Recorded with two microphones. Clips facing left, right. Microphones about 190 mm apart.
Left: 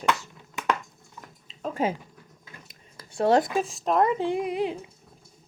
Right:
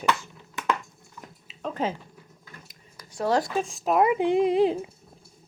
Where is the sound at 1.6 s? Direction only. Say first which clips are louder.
Left 2 dB; 10° left (ahead or behind).